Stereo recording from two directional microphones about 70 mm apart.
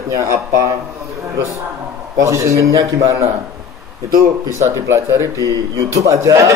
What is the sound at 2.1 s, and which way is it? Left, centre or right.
A man's voice, right.